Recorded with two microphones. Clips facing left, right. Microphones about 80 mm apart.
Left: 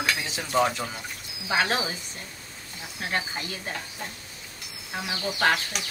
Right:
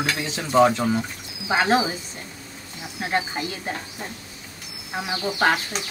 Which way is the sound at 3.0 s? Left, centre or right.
Centre.